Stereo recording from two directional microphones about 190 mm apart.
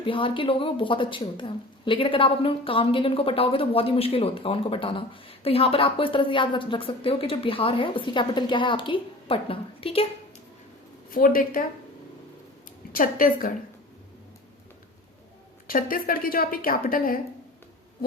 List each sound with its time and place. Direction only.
0.0 s speech: 25° left (ahead or behind)
11.1 s speech: 50° left (ahead or behind)
12.9 s speech: 50° left (ahead or behind)
15.6 s speech: 50° left (ahead or behind)